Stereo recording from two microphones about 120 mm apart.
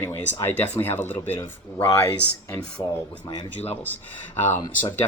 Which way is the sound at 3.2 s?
35° left (ahead or behind).